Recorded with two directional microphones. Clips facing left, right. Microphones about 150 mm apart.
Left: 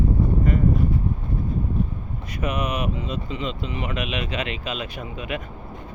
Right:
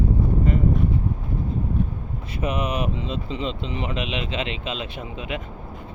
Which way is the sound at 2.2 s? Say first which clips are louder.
Right 1 dB; 30° right (ahead or behind).